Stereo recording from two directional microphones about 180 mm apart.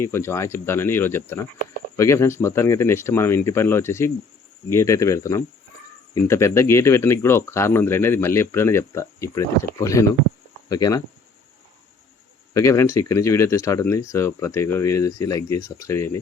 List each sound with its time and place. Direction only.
0.0 s speech: 15° left (ahead or behind)
12.5 s speech: 15° left (ahead or behind)